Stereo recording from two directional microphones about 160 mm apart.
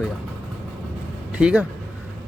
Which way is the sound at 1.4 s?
5° right (ahead or behind).